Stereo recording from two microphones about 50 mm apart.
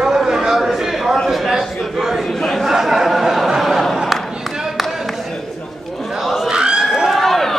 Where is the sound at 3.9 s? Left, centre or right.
Centre.